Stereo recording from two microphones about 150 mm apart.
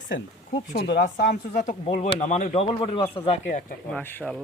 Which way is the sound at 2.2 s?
55° left (ahead or behind).